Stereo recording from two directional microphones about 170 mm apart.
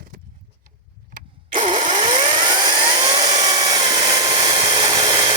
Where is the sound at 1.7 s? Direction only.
30° right (ahead or behind).